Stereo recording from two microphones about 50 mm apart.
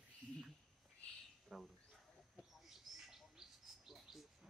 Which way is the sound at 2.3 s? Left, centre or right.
Centre.